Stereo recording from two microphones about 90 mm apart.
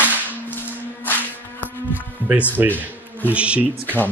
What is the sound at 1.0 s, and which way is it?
Music, 20° left (ahead or behind).